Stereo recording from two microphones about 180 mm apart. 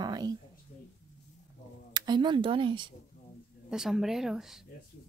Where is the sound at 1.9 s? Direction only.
25° right (ahead or behind).